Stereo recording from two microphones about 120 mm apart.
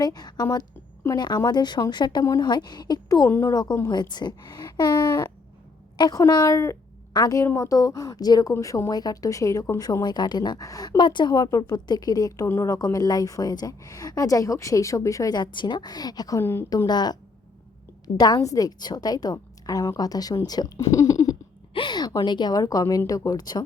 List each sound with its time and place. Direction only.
0.0 s a woman's voice: 35° left (ahead or behind)
3.2 s a woman's voice: 20° left (ahead or behind)
3.5 s a woman's voice: 35° left (ahead or behind)
16.4 s a woman's voice: 20° left (ahead or behind)
16.6 s speech: 35° left (ahead or behind)
18.2 s speech: 30° left (ahead or behind)
21.7 s speech: 40° left (ahead or behind)